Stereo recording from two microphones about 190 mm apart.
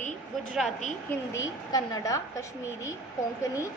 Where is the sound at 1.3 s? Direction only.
20° left (ahead or behind).